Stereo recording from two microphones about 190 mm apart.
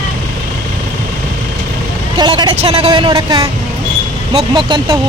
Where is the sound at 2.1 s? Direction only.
25° right (ahead or behind).